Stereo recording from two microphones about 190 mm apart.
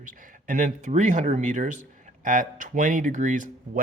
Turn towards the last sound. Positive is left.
turn(degrees=-40)  # may be behind; listen again after turning